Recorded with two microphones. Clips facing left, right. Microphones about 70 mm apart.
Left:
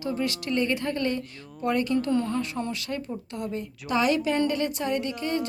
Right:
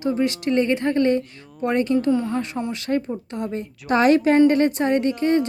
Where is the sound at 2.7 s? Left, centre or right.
Right.